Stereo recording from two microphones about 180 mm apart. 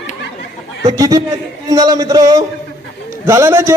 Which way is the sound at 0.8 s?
20° right (ahead or behind).